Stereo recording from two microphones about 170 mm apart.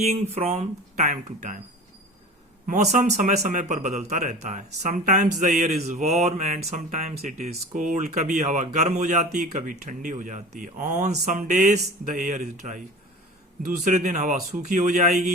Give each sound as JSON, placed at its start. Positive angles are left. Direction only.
{"t": 0.0, "sound": "speech", "side_deg": -40}
{"t": 2.6, "sound": "speech", "side_deg": -45}